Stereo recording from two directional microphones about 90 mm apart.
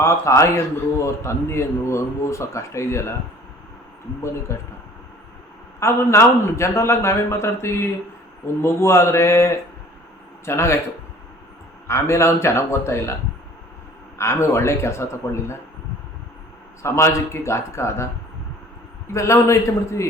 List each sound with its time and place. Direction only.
0.0 s a man's voice: 35° left (ahead or behind)
4.5 s a man's voice: 30° left (ahead or behind)
5.8 s a man's voice: 30° left (ahead or behind)
11.9 s a man's voice: 30° left (ahead or behind)
14.2 s a man's voice: 30° left (ahead or behind)
16.8 s a man's voice: 30° left (ahead or behind)
19.1 s a man's voice: 35° left (ahead or behind)